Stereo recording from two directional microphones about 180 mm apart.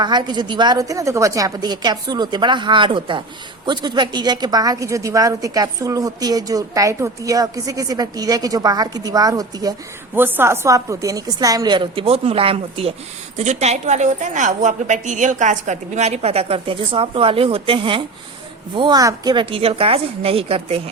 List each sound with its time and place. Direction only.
0.0 s a woman's voice: 25° right (ahead or behind)